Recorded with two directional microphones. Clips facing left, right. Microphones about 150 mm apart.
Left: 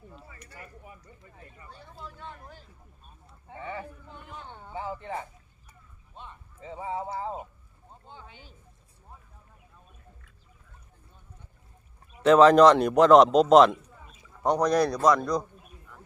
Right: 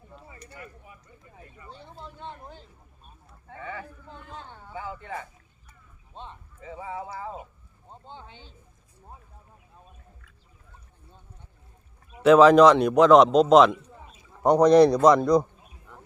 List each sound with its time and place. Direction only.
0.3 s a man's voice: 25° right (ahead or behind)
1.7 s a man's voice: 25° right (ahead or behind)
3.5 s speech: 25° left (ahead or behind)
6.6 s speech: 30° left (ahead or behind)
7.9 s speech: 25° right (ahead or behind)
12.2 s a man's voice: 5° right (ahead or behind)
14.4 s a man's voice: 15° right (ahead or behind)